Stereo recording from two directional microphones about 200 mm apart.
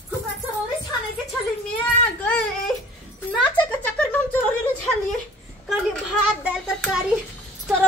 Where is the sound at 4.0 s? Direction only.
10° left (ahead or behind).